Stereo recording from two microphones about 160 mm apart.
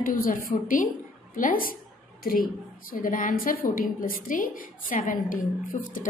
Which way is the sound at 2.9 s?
60° left (ahead or behind).